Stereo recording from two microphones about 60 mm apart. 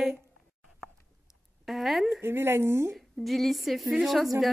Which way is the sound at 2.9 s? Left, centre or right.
Centre.